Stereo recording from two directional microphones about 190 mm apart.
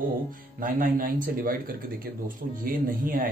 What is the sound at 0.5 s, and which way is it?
Speech, 45° right (ahead or behind).